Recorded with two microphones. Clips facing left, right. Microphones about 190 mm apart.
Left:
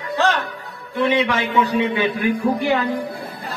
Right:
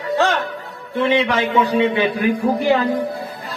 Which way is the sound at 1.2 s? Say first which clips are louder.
Right 2 dB; 35° right (ahead or behind).